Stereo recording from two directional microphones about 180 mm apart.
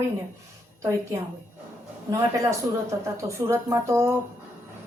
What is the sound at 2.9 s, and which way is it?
Speech, 15° right (ahead or behind).